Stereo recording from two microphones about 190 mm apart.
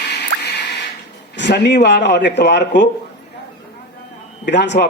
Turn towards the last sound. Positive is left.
turn(degrees=65)  # may be behind; listen again after turning